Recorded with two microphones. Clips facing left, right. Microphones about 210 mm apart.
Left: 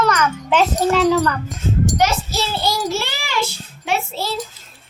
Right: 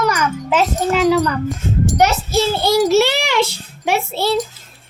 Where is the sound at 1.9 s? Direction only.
60° right (ahead or behind).